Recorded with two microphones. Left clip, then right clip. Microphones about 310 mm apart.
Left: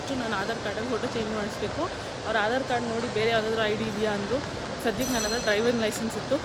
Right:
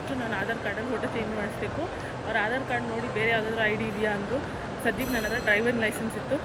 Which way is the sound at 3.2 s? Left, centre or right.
Centre.